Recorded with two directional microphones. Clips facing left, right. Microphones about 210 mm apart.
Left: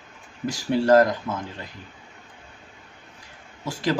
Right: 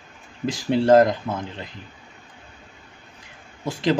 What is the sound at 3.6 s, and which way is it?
Speech, 20° right (ahead or behind).